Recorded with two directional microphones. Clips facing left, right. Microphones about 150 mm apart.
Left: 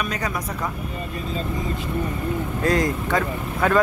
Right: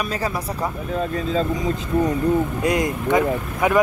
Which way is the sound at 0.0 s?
30° right (ahead or behind).